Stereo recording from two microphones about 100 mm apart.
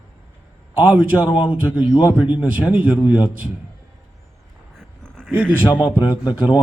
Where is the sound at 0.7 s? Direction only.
15° right (ahead or behind).